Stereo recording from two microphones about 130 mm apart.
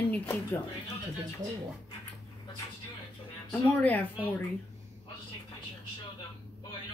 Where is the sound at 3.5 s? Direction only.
15° left (ahead or behind).